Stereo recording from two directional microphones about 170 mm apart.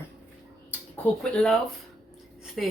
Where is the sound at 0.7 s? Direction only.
5° left (ahead or behind).